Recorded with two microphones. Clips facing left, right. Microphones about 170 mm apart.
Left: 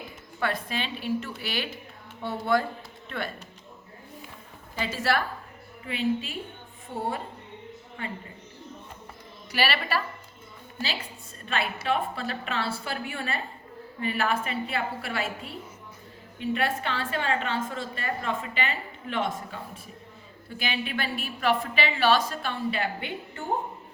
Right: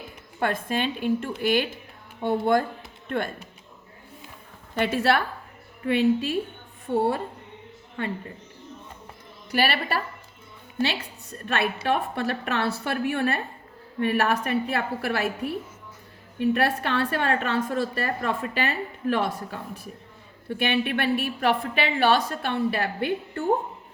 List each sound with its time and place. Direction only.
0.3 s a woman's voice: 50° right (ahead or behind)
4.7 s a woman's voice: 60° right (ahead or behind)
9.5 s a woman's voice: 50° right (ahead or behind)
11.4 s a woman's voice: 65° right (ahead or behind)